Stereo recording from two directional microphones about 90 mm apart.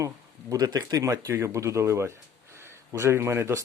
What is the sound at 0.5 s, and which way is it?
Speech, 45° right (ahead or behind).